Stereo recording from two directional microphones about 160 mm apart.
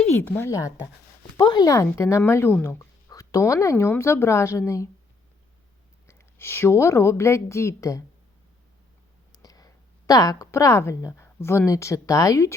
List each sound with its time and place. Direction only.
0.1 s speech: 10° left (ahead or behind)
6.1 s speech: 15° left (ahead or behind)
9.3 s speech: 25° left (ahead or behind)